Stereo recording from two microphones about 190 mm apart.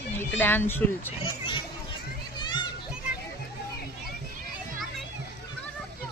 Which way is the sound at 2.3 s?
25° left (ahead or behind).